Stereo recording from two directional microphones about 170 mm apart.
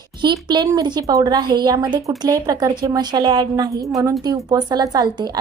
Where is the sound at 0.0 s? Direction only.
25° right (ahead or behind).